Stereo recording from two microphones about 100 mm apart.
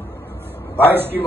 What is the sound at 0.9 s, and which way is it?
Speech, 20° right (ahead or behind).